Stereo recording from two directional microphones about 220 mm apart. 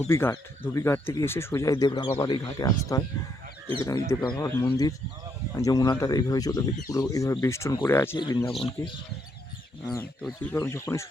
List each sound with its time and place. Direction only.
0.1 s speech: 10° left (ahead or behind)